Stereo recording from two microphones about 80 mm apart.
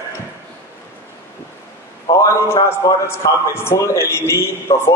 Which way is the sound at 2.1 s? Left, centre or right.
Left.